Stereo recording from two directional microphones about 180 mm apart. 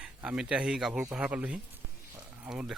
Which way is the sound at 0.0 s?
5° right (ahead or behind).